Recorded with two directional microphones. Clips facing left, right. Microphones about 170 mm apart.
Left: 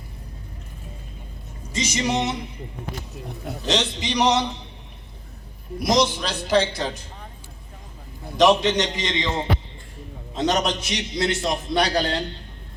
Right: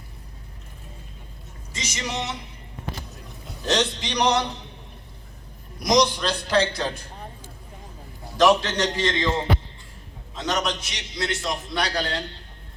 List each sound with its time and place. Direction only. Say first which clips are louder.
1.7 s speech: left 9 dB; 30° left (ahead or behind)
2.0 s a man's voice: left 7 dB; 20° left (ahead or behind)
3.7 s a man's voice: even; 5° left (ahead or behind)
6.0 s a man's voice: right 1 dB; 10° left (ahead or behind)
8.4 s a man's voice: left 2 dB; 15° left (ahead or behind)
10.3 s a man's voice: left 4 dB; 25° left (ahead or behind)